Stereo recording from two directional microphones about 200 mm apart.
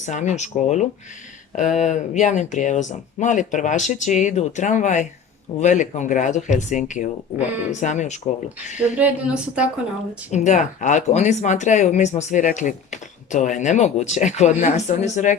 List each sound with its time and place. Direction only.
0.0 s speech: 35° left (ahead or behind)
9.0 s a woman's voice: 5° right (ahead or behind)
10.3 s speech: 35° left (ahead or behind)